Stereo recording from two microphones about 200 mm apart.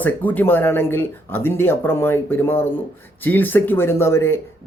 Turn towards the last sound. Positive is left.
turn(degrees=10)  # may be behind; listen again after turning